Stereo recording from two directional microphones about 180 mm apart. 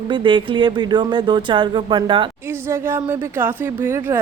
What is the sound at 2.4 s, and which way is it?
A woman's voice, 15° right (ahead or behind).